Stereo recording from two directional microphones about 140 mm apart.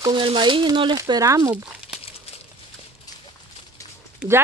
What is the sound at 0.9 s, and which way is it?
Speech, 25° right (ahead or behind).